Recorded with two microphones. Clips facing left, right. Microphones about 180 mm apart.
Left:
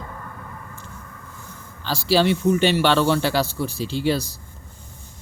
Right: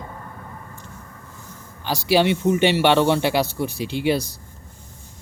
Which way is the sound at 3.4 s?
60° right (ahead or behind).